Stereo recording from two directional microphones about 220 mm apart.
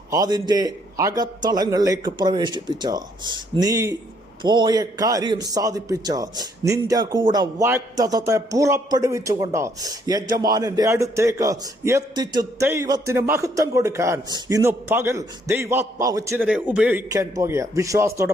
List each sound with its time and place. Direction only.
0.1 s a man's voice: 20° right (ahead or behind)